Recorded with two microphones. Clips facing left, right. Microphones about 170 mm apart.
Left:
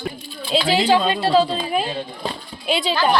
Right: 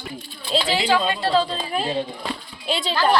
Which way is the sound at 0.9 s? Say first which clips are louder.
Left 2 dB; 20° left (ahead or behind).